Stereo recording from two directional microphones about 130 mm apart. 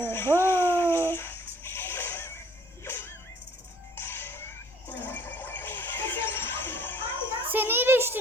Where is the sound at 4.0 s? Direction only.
15° left (ahead or behind).